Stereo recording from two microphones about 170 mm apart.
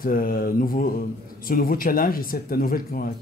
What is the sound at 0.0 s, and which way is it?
Speech, 55° left (ahead or behind).